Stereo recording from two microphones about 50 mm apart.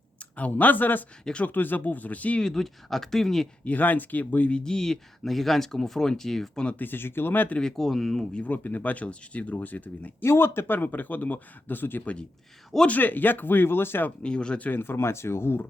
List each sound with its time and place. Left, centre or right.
0.3 s speech: left
1.2 s speech: centre
1.5 s speech: left
2.4 s speech: centre
3.6 s speech: left
4.6 s speech: centre
6.7 s speech: left
7.6 s speech: centre
8.3 s speech: left
8.5 s speech: left
10.2 s speech: left
14.2 s speech: centre
14.6 s speech: left